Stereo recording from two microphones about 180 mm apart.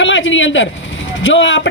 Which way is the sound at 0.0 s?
90° left.